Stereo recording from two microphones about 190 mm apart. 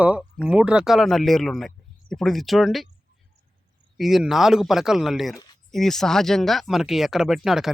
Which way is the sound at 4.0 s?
Centre (ahead or behind).